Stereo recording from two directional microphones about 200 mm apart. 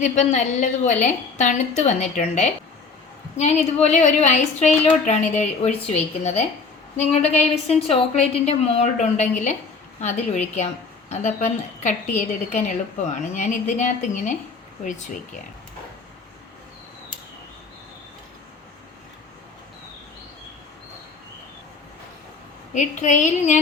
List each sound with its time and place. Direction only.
0.0 s a woman's voice: 35° left (ahead or behind)
22.7 s a woman's voice: 35° left (ahead or behind)